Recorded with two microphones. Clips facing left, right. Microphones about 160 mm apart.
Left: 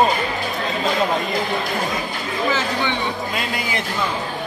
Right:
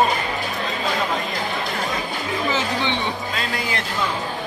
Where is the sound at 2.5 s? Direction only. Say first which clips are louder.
Left 1 dB; 20° right (ahead or behind).